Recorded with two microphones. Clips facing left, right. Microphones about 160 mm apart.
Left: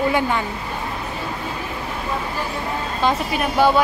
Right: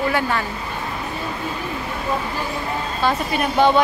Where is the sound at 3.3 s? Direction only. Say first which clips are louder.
Right 2 dB; 5° left (ahead or behind).